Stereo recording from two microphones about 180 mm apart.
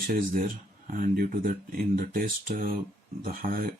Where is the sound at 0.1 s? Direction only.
45° right (ahead or behind).